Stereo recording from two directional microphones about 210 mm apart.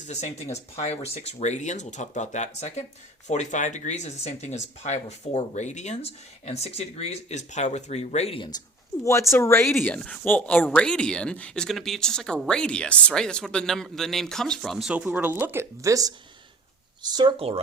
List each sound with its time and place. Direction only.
0.1 s speech: 30° left (ahead or behind); by 17.6 s 25° right (ahead or behind)